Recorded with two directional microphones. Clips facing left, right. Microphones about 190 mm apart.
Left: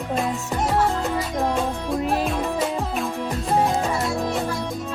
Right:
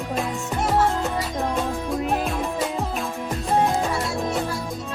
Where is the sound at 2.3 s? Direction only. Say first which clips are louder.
Left 2 dB; centre (ahead or behind).